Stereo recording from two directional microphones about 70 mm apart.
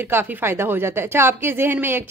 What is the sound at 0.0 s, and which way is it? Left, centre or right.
Speech, right.